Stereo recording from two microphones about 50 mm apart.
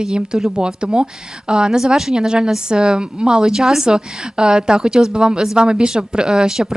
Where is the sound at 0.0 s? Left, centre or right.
Centre.